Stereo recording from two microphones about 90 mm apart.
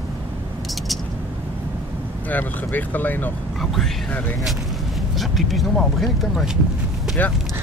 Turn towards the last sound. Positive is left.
turn(degrees=20)  # may be behind; listen again after turning